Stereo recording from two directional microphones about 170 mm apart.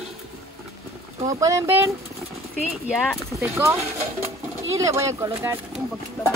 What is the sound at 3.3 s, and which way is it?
Speech, 15° right (ahead or behind).